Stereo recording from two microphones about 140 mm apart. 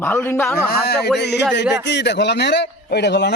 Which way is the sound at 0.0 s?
15° left (ahead or behind).